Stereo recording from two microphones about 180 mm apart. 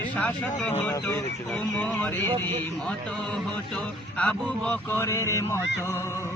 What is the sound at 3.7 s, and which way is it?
Music, 5° left (ahead or behind).